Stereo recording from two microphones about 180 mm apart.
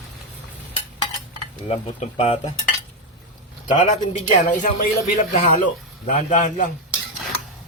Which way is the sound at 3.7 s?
45° left (ahead or behind).